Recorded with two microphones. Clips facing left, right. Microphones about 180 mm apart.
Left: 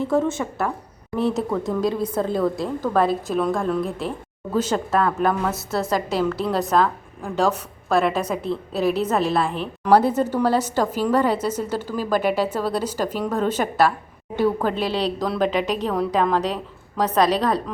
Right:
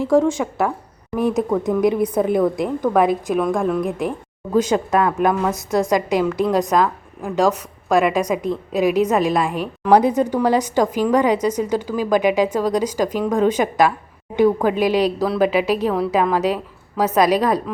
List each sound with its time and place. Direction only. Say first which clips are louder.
0.4 s a woman's voice: right 4 dB; 5° right (ahead or behind)